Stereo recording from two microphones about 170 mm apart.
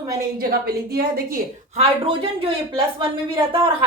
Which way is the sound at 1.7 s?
35° right (ahead or behind).